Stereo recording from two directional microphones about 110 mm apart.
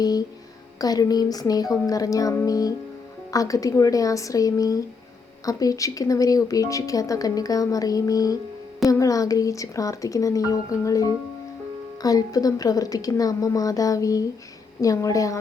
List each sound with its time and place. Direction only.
0.0 s a woman's voice: 35° left (ahead or behind)